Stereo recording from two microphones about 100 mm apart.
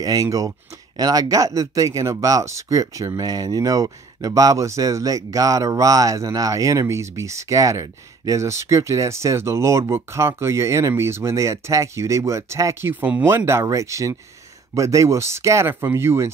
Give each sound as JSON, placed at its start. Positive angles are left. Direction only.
{"t": 0.0, "sound": "speech", "side_deg": -35}